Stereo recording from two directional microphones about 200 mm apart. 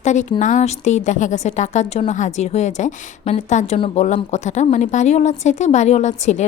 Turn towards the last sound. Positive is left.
turn(degrees=35)  # may be behind; listen again after turning